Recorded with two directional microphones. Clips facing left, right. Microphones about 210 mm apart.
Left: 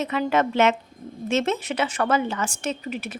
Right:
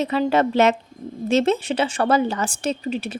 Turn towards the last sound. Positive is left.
turn(degrees=-30)  # may be behind; listen again after turning